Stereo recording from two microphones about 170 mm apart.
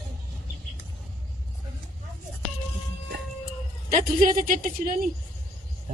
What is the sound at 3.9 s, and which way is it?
Speech, 50° right (ahead or behind).